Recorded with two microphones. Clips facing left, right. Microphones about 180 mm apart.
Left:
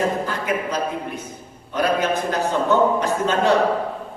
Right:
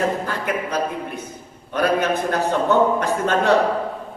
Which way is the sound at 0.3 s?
60° right (ahead or behind).